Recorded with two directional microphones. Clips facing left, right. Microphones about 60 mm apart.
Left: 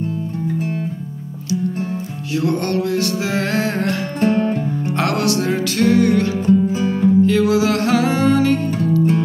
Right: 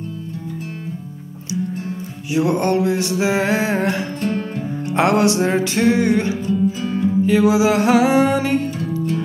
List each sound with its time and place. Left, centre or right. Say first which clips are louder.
2.3 s music: right 2 dB; centre
6.4 s music: left 4 dB; left
7.2 s music: right 1 dB; centre